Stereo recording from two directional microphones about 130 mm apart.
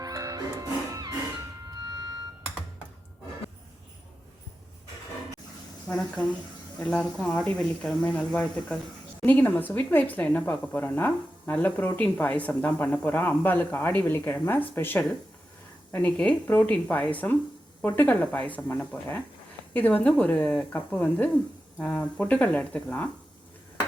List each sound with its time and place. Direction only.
0.0 s music: 25° right (ahead or behind)
6.0 s a woman's voice: 10° left (ahead or behind)